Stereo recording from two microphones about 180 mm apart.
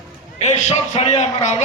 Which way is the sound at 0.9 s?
35° left (ahead or behind).